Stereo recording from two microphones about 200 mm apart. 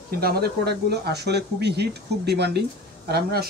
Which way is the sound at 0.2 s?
50° right (ahead or behind).